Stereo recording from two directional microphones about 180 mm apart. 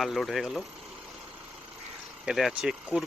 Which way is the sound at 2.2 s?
Centre (ahead or behind).